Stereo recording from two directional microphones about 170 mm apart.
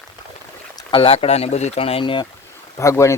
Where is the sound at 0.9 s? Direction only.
35° left (ahead or behind).